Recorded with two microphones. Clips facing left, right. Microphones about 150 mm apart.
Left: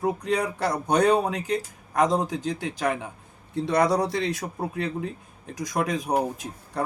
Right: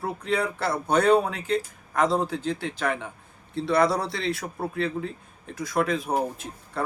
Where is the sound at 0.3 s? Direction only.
15° left (ahead or behind).